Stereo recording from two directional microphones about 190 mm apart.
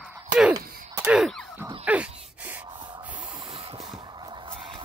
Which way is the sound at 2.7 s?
25° right (ahead or behind).